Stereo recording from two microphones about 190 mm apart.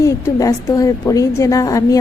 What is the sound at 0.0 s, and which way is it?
A woman's voice, 15° left (ahead or behind).